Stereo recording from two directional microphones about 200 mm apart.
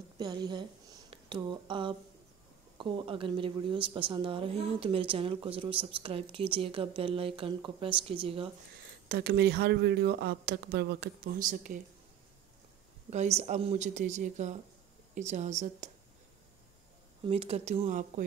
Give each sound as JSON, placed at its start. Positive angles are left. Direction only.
{"t": 0.2, "sound": "a woman's voice", "side_deg": -20}
{"t": 9.1, "sound": "speech", "side_deg": -50}
{"t": 13.1, "sound": "speech", "side_deg": -35}
{"t": 17.2, "sound": "speech", "side_deg": -30}